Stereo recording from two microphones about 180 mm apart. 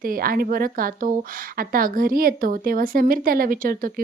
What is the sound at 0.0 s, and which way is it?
Speech, 55° right (ahead or behind).